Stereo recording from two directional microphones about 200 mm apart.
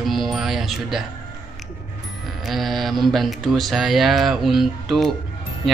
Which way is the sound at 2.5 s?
Centre (ahead or behind).